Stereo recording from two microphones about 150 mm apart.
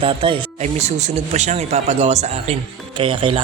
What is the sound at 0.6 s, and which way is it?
Speech, 45° right (ahead or behind).